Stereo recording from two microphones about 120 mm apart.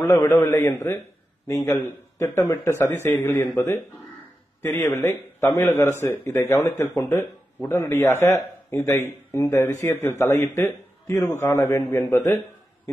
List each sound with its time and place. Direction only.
0.0 s a man's voice: 20° left (ahead or behind)